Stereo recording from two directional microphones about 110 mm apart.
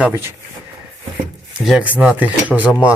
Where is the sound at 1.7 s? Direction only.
10° right (ahead or behind).